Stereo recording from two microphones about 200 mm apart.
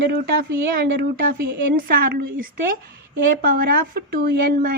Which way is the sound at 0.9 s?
45° right (ahead or behind).